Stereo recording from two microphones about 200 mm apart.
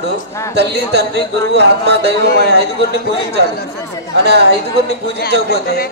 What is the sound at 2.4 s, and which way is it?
Speech, 50° left (ahead or behind).